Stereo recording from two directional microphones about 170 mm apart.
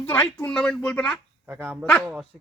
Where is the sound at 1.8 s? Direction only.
10° left (ahead or behind).